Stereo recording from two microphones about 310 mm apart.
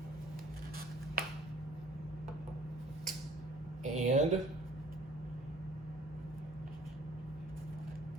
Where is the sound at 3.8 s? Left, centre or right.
Right.